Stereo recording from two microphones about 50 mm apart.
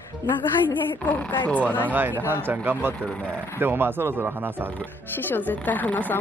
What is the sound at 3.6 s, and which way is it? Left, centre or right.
Speech, right.